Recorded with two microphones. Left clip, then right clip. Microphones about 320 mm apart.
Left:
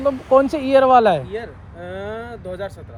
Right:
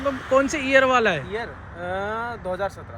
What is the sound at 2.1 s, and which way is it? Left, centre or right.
Speech, right.